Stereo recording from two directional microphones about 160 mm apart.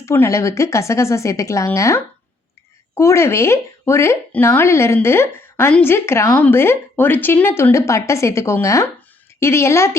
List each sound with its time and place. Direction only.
0.0 s speech: 15° left (ahead or behind)